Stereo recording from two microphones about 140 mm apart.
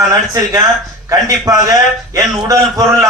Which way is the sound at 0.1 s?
25° right (ahead or behind).